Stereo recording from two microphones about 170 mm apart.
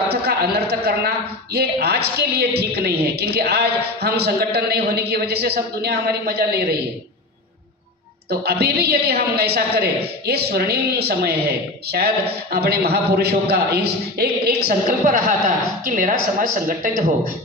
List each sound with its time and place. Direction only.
0.1 s a woman's voice: 70° right (ahead or behind)
8.3 s a woman's voice: 70° right (ahead or behind); by 17.0 s 50° right (ahead or behind)